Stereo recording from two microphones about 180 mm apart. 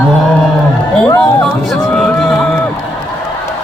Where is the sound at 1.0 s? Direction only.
20° left (ahead or behind).